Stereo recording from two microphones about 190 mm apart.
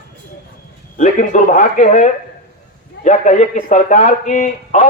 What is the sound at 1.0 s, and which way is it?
Speech, 40° left (ahead or behind).